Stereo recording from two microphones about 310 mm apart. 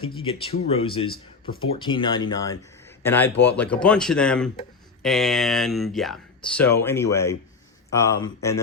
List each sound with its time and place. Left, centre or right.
0.0 s speech: centre